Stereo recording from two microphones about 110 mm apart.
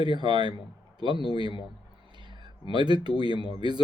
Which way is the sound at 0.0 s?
45° right (ahead or behind).